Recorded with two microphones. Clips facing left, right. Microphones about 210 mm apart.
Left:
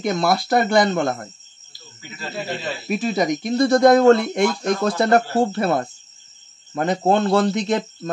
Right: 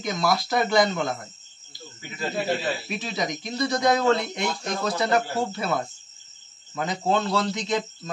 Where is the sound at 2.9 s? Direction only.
45° left (ahead or behind).